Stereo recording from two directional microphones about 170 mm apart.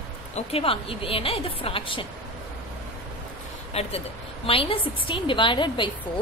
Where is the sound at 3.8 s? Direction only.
40° left (ahead or behind).